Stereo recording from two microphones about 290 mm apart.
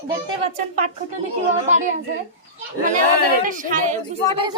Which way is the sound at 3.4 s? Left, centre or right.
Right.